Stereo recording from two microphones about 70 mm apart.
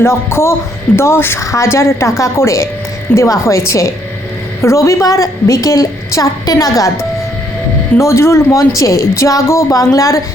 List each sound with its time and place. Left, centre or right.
0.0 s speech: left
1.4 s a woman's voice: left
6.4 s a woman's voice: left
6.7 s a woman's voice: left